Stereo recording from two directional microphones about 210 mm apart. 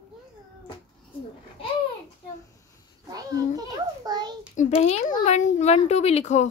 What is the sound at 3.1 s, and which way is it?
A child's voice, 15° right (ahead or behind).